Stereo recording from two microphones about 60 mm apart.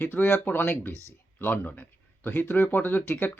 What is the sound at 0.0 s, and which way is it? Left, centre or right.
Speech, left.